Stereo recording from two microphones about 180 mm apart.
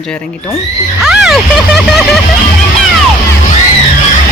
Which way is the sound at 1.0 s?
5° right (ahead or behind).